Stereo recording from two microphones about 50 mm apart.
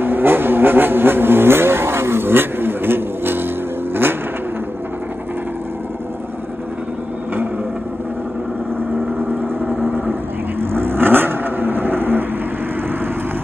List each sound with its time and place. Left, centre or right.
0.0 s vehicle: right
9.8 s vehicle: right
10.6 s vehicle: right